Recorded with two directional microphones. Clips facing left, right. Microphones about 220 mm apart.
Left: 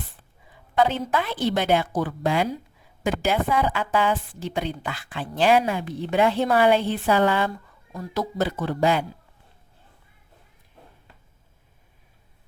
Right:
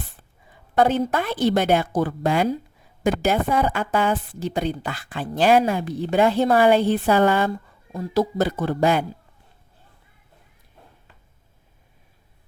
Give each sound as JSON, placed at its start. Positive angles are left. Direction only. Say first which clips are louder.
{"t": 0.8, "sound": "a woman's voice", "louder": "right 3 dB", "side_deg": -50}
{"t": 7.9, "sound": "speech", "louder": "right 7 dB", "side_deg": -25}
{"t": 8.4, "sound": "a woman's voice", "louder": "right 3 dB", "side_deg": -40}